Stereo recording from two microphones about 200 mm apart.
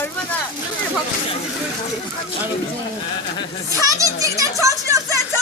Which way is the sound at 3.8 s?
15° right (ahead or behind).